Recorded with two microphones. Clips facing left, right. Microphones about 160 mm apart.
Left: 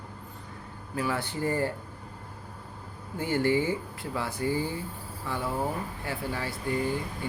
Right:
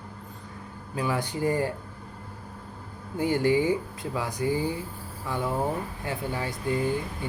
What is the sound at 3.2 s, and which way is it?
Speech, 15° right (ahead or behind).